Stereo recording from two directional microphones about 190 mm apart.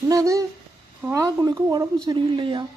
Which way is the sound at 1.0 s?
15° right (ahead or behind).